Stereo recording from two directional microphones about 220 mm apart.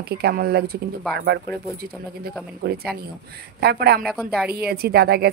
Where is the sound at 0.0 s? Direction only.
45° right (ahead or behind).